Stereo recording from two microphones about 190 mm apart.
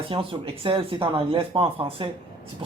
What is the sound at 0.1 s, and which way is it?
Speech, 25° right (ahead or behind).